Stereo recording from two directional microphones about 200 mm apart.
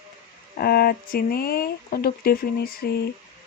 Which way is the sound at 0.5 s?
50° left (ahead or behind).